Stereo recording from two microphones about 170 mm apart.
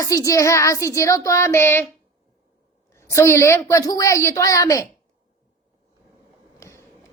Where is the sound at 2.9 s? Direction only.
15° left (ahead or behind).